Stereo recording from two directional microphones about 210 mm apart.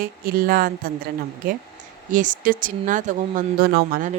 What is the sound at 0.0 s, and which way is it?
Speech, 45° right (ahead or behind).